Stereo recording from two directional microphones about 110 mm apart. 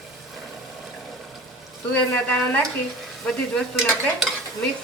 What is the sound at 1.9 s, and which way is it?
Speech, 15° left (ahead or behind).